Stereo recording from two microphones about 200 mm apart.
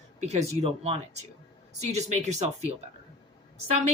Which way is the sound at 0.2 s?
35° right (ahead or behind).